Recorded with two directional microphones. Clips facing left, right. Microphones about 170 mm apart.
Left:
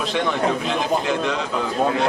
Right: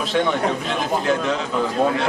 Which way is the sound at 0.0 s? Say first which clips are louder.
Right 1 dB; centre (ahead or behind).